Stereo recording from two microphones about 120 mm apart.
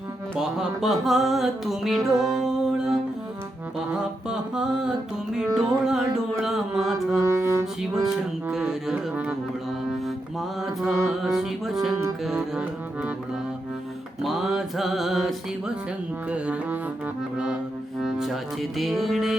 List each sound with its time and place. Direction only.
0.3 s music: 5° right (ahead or behind)
7.3 s music: 25° right (ahead or behind)
8.0 s music: 5° right (ahead or behind)
10.6 s music: centre (ahead or behind)
14.2 s music: centre (ahead or behind)
16.3 s music: 10° right (ahead or behind)